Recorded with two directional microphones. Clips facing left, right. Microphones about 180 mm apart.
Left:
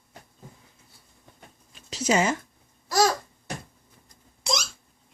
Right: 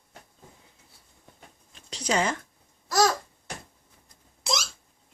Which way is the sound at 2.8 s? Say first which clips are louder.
Left 1 dB; centre (ahead or behind).